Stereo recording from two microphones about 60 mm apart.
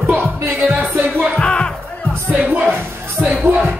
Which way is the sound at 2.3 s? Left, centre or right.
Right.